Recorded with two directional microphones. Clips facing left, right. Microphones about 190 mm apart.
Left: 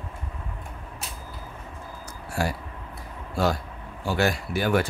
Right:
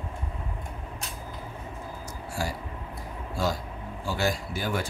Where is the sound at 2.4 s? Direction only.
65° left (ahead or behind).